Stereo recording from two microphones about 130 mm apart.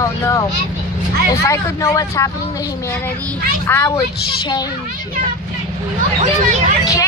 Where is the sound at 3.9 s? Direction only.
30° left (ahead or behind).